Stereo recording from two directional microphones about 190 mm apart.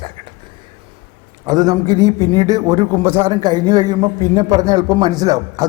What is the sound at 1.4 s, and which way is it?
A man's voice, 20° right (ahead or behind).